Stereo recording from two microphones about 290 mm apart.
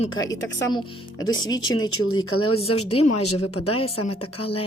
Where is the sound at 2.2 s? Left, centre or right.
Left.